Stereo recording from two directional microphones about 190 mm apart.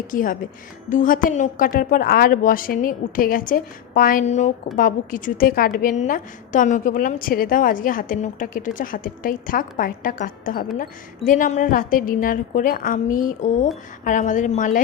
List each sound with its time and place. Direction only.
0.1 s a woman's voice: 45° left (ahead or behind)